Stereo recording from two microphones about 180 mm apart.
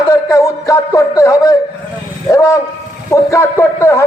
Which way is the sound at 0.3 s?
15° left (ahead or behind).